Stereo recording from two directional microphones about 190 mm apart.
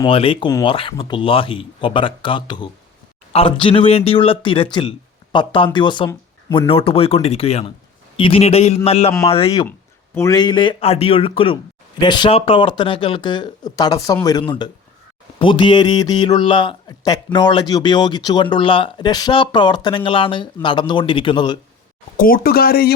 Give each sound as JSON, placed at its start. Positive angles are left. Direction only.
{"t": 0.0, "sound": "speech", "side_deg": 30}
{"t": 10.2, "sound": "speech", "side_deg": 20}
{"t": 22.2, "sound": "speech", "side_deg": 50}